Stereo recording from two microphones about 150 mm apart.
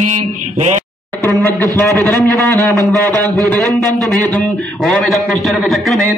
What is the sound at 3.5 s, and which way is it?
A man's voice, centre (ahead or behind).